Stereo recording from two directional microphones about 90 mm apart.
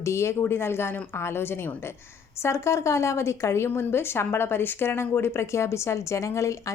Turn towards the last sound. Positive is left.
turn(degrees=35)  # may be behind; listen again after turning